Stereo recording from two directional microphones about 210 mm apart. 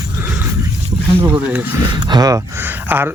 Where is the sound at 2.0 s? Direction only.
20° right (ahead or behind).